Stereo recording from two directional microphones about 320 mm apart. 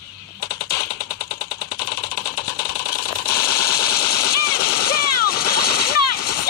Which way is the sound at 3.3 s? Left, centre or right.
Centre.